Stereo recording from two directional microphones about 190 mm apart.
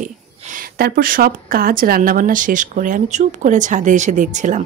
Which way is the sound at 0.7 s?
50° right (ahead or behind).